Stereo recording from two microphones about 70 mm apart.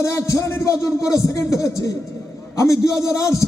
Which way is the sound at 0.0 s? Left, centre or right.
Left.